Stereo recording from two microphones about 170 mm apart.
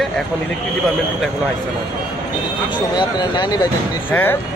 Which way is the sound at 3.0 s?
25° left (ahead or behind).